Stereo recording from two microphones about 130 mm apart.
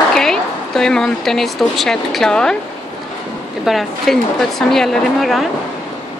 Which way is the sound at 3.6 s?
Centre (ahead or behind).